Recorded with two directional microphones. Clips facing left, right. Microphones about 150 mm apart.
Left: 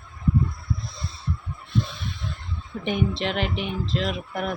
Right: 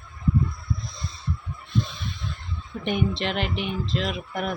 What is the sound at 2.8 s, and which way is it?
Speech, centre (ahead or behind).